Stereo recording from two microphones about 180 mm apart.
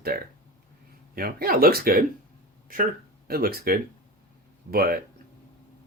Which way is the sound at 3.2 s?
55° right (ahead or behind).